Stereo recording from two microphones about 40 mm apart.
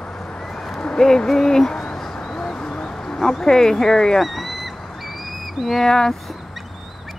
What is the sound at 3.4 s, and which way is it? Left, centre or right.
Speech, centre.